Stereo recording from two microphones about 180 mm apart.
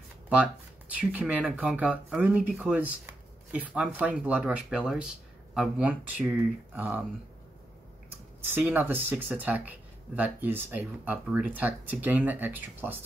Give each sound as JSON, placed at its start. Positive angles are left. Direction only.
{"t": 0.3, "sound": "speech", "side_deg": -5}
{"t": 8.5, "sound": "speech", "side_deg": -10}